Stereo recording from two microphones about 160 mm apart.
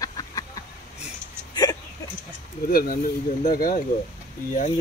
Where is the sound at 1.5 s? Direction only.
25° left (ahead or behind).